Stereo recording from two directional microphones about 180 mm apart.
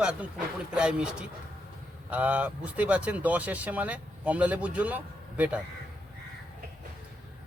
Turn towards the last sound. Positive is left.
turn(degrees=-10)  # may be behind; listen again after turning